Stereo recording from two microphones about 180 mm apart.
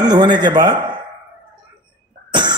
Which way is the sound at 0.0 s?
25° right (ahead or behind).